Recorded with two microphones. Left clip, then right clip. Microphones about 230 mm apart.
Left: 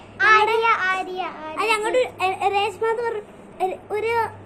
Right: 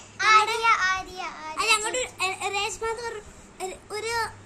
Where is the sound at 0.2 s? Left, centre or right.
Right.